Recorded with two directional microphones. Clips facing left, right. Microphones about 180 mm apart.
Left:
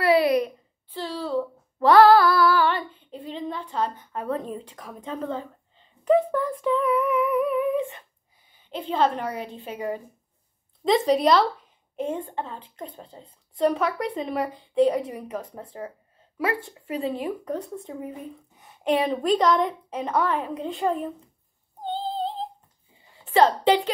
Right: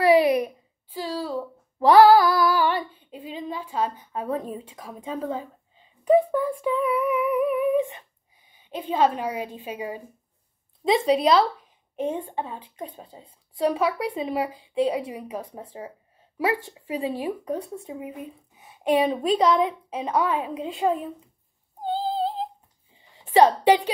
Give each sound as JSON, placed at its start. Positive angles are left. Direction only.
{"t": 0.0, "sound": "a sound", "side_deg": -15}
{"t": 8.5, "sound": "a woman's voice", "side_deg": -15}
{"t": 21.8, "sound": "female singing", "side_deg": -5}
{"t": 23.1, "sound": "a woman's voice", "side_deg": -15}